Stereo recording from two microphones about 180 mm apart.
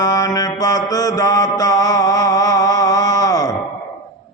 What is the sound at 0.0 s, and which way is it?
Mantra, 20° left (ahead or behind).